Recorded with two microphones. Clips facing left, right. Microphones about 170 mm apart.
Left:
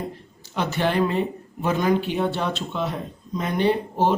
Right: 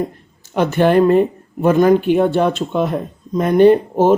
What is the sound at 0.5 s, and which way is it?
Speech, 50° right (ahead or behind).